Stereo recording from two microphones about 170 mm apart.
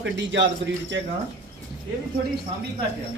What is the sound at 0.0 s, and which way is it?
Speech, 90° right.